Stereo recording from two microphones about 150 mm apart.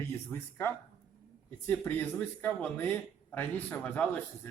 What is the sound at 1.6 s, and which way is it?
Speech, 15° left (ahead or behind).